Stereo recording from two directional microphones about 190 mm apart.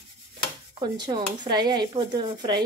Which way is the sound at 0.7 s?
25° right (ahead or behind).